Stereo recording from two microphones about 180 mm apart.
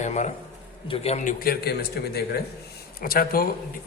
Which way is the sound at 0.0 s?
40° left (ahead or behind).